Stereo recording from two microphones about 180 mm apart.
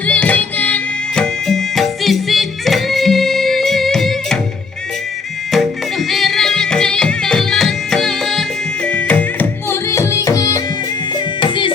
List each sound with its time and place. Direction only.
0.0 s music: 5° left (ahead or behind)
5.5 s music: centre (ahead or behind); by 11.7 s 25° left (ahead or behind)